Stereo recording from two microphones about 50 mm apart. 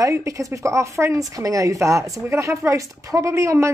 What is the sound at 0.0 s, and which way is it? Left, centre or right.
A woman's voice, right.